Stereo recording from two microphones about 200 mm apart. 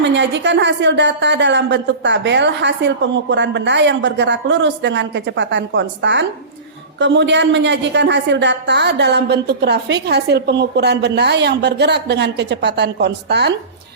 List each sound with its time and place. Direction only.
0.0 s a woman's voice: 65° right (ahead or behind)